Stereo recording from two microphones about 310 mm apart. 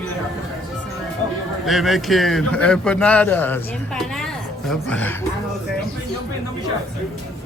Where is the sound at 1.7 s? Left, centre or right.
Centre.